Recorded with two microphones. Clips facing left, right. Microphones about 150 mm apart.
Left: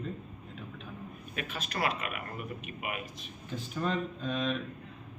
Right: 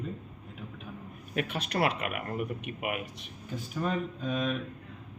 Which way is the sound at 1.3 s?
70° right (ahead or behind).